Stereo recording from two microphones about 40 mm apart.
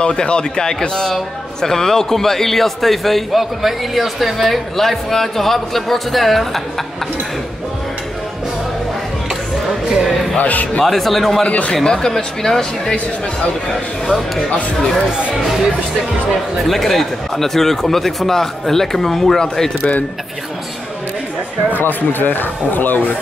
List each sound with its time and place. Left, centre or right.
0.0 s speech: left; by 6.6 s centre
9.8 s a man's voice: centre
10.3 s a man's voice: left
10.9 s speech: centre
11.4 s a man's voice: left
11.7 s speech: centre
16.6 s speech: centre
21.7 s speech: left